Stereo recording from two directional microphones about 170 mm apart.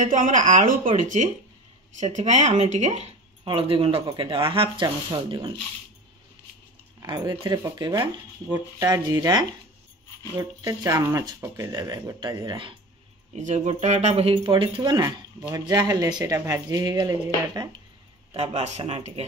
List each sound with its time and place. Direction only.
0.0 s speech: 50° right (ahead or behind); by 5.5 s 25° right (ahead or behind)
7.0 s speech: 25° right (ahead or behind)
13.4 s speech: 45° right (ahead or behind); by 17.6 s 25° right (ahead or behind)
18.3 s speech: 40° right (ahead or behind)